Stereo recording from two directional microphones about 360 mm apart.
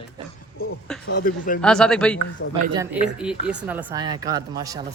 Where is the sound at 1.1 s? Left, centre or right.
Left.